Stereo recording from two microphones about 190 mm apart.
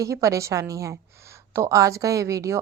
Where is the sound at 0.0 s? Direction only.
15° right (ahead or behind).